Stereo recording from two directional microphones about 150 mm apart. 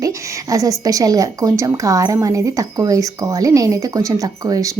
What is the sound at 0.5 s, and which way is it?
A woman's voice, 25° right (ahead or behind).